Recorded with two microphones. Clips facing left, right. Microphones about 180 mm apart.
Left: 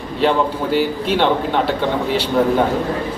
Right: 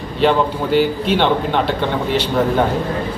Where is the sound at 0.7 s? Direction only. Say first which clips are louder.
Right 3 dB; 5° left (ahead or behind).